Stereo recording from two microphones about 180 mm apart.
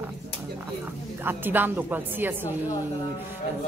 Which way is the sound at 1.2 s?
10° right (ahead or behind).